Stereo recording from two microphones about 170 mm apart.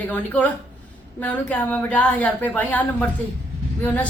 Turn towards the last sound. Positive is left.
turn(degrees=10)  # may be behind; listen again after turning